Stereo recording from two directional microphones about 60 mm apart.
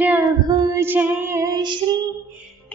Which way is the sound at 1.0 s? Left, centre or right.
Right.